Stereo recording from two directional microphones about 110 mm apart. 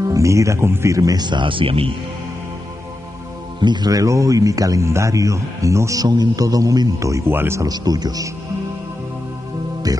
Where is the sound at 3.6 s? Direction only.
40° right (ahead or behind); by 7.7 s 20° right (ahead or behind).